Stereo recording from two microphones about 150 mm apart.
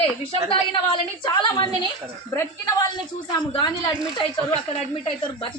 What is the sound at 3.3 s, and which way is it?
Speech, 30° left (ahead or behind).